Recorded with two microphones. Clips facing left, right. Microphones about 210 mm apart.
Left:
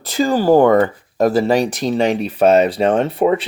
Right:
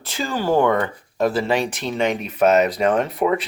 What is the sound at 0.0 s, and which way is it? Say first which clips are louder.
Speech: left 8 dB; 40° left (ahead or behind).